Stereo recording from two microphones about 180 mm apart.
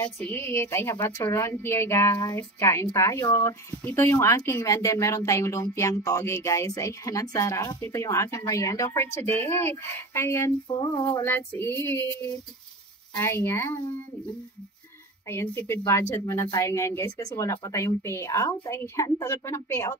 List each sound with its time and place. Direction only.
0.0 s a woman's voice: 10° left (ahead or behind)
10.8 s a sound: 25° left (ahead or behind)
11.2 s a woman's voice: 10° left (ahead or behind)
15.2 s a woman's voice: 15° left (ahead or behind)